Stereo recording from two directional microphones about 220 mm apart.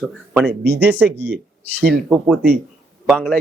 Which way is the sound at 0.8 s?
5° right (ahead or behind).